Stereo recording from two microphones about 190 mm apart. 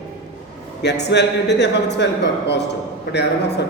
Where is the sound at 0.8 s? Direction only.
65° left (ahead or behind).